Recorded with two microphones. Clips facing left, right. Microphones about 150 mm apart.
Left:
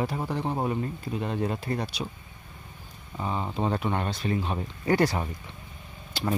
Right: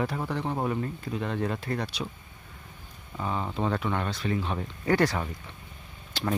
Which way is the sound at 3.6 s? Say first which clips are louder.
Left 1 dB; 25° left (ahead or behind).